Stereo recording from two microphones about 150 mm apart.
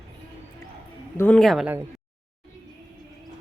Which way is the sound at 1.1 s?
15° left (ahead or behind).